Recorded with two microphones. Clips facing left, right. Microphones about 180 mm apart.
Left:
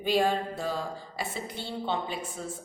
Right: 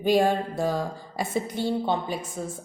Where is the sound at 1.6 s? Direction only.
10° right (ahead or behind).